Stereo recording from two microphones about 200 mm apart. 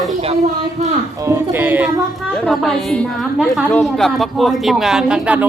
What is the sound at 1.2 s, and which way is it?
Speech, 10° right (ahead or behind).